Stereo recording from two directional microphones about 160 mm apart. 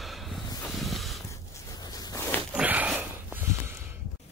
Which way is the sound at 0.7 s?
Centre (ahead or behind).